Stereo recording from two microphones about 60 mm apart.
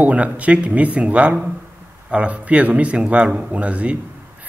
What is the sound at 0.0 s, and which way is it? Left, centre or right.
A man's voice, right.